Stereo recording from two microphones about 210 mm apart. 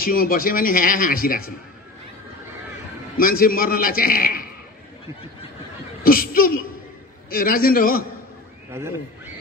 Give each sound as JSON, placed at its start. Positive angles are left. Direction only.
{"t": 0.0, "sound": "speech", "side_deg": 45}
{"t": 3.2, "sound": "speech", "side_deg": 45}
{"t": 6.0, "sound": "speech", "side_deg": 45}